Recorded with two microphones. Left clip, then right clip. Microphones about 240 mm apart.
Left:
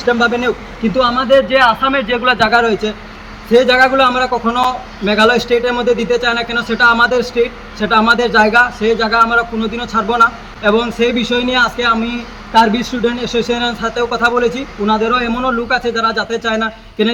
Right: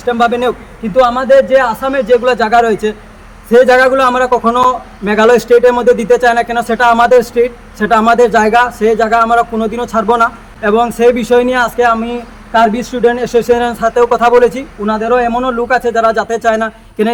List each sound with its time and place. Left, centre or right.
0.0 s a man's voice: centre